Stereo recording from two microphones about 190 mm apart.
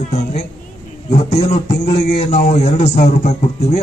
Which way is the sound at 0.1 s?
35° left (ahead or behind).